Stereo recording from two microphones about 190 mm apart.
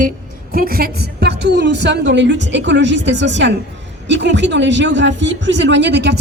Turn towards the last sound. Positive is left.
turn(degrees=-65)  # may be behind; listen again after turning